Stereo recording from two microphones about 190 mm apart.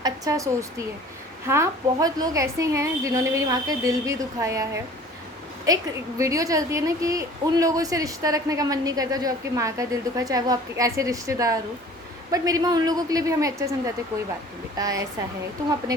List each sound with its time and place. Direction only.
0.0 s a woman's voice: 15° right (ahead or behind)